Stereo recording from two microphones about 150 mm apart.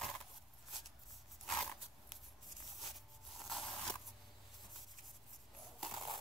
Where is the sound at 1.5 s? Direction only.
5° left (ahead or behind).